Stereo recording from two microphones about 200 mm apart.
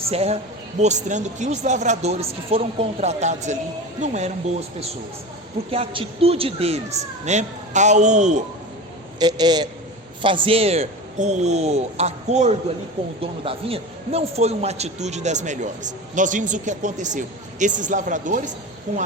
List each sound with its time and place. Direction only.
0.1 s a man's voice: 30° right (ahead or behind)
5.7 s a man's voice: 30° right (ahead or behind)
9.1 s a man's voice: 20° right (ahead or behind); by 18.5 s 40° right (ahead or behind)